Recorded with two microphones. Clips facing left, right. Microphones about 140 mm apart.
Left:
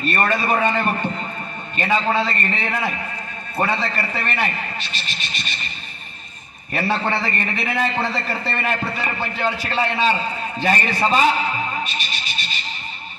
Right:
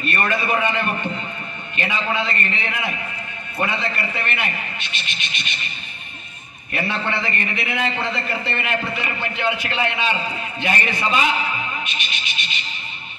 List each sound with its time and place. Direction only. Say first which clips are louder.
0.0 s a man's voice: left 2 dB; 35° left (ahead or behind)
6.7 s a man's voice: left 3 dB; 40° left (ahead or behind)
11.8 s neigh: left 2 dB; 40° left (ahead or behind)